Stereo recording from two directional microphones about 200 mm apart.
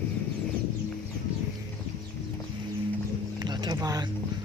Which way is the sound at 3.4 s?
20° right (ahead or behind).